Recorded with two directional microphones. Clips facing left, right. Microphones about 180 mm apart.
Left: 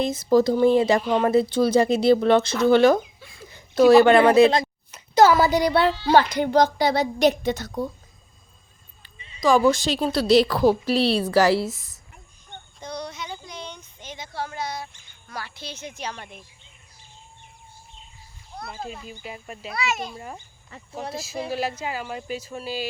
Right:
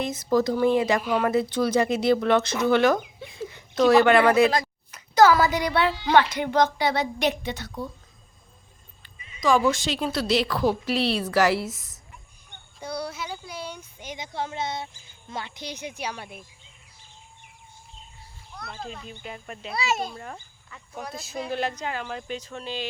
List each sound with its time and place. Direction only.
0.0 s a woman's voice: 30° left (ahead or behind)
3.2 s a sound: 20° right (ahead or behind)
3.8 s a woman's voice: 30° left (ahead or behind)
9.1 s a woman's voice: 30° left (ahead or behind)
12.8 s speech: 10° right (ahead or behind)
18.9 s speech: 5° left (ahead or behind)
19.7 s a child's voice: 30° right (ahead or behind)
20.1 s speech: 10° left (ahead or behind)
20.7 s speech: 35° left (ahead or behind)
21.5 s speech: 5° left (ahead or behind)